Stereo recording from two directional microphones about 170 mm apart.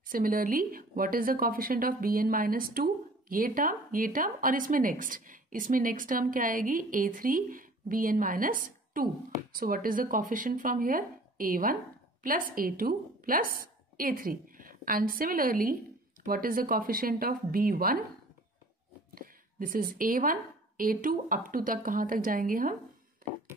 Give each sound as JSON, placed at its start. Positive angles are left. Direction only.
{"t": 0.1, "sound": "a woman's voice", "side_deg": -55}
{"t": 19.1, "sound": "a woman's voice", "side_deg": -55}